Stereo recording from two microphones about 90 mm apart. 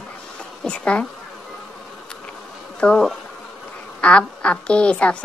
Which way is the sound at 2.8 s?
10° left (ahead or behind).